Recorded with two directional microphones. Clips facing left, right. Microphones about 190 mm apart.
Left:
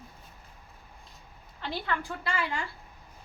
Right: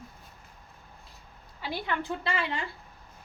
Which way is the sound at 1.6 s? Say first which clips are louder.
Right 1 dB; 15° right (ahead or behind).